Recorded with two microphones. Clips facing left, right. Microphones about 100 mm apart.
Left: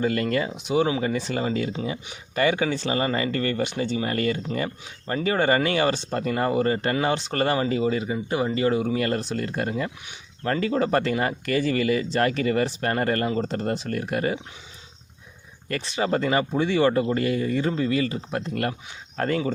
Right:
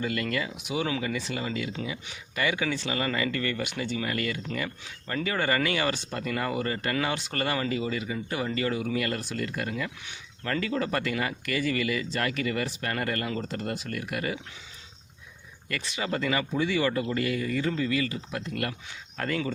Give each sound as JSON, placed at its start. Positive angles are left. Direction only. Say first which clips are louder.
{"t": 0.0, "sound": "speech", "louder": "left 6 dB", "side_deg": 35}
{"t": 15.7, "sound": "speech", "louder": "left 7 dB", "side_deg": 35}